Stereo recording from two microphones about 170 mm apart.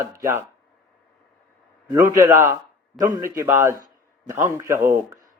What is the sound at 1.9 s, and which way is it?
Speech, 20° right (ahead or behind).